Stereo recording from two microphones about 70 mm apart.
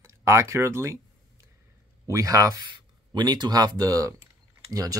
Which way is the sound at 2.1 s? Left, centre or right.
Right.